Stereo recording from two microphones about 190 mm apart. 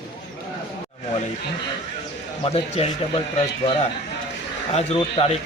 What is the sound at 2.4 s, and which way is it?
Speech, 30° left (ahead or behind).